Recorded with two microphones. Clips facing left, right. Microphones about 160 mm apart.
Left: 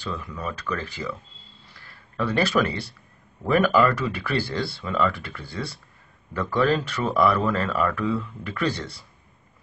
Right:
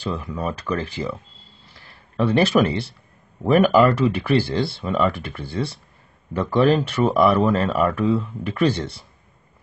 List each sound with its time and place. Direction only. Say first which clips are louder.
0.0 s speech: right 5 dB; 30° right (ahead or behind)
2.1 s speech: right 5 dB; 25° right (ahead or behind)